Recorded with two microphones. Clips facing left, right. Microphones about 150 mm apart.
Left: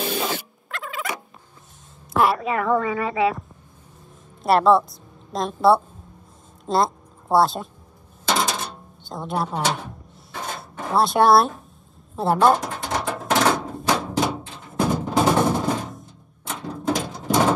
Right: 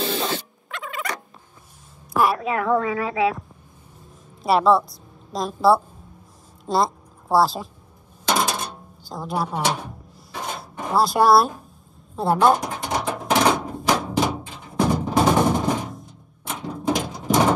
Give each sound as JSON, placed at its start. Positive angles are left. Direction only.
{"t": 0.0, "sound": "rodents", "side_deg": 5}
{"t": 2.1, "sound": "a woman's voice", "side_deg": 0}
{"t": 8.3, "sound": "drawer open or close", "side_deg": -5}
{"t": 10.9, "sound": "a woman's voice", "side_deg": 0}
{"t": 13.2, "sound": "music", "side_deg": 0}
{"t": 15.6, "sound": "a sound", "side_deg": -10}
{"t": 15.9, "sound": "music", "side_deg": 0}